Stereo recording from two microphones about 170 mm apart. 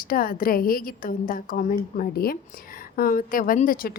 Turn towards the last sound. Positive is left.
turn(degrees=60)  # may be behind; listen again after turning